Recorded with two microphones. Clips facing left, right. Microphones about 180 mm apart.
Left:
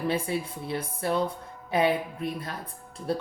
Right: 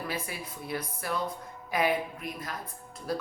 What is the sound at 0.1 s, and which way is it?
Speech, 30° left (ahead or behind).